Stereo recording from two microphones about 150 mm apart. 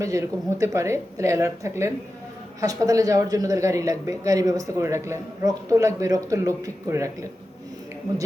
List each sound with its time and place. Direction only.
0.0 s speech: 20° right (ahead or behind)